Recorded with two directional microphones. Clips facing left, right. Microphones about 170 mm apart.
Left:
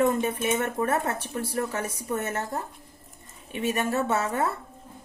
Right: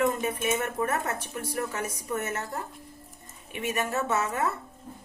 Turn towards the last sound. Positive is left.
turn(degrees=30)  # may be behind; listen again after turning